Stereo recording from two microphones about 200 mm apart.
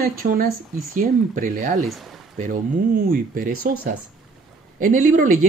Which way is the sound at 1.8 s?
Centre (ahead or behind).